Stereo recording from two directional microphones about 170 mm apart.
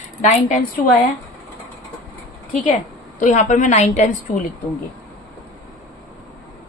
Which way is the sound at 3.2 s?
45° left (ahead or behind).